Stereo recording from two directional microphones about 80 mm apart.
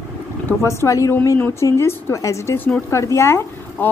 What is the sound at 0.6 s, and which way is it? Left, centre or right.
Speech, left.